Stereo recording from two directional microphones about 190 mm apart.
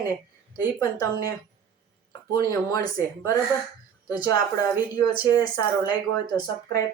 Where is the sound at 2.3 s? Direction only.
20° left (ahead or behind).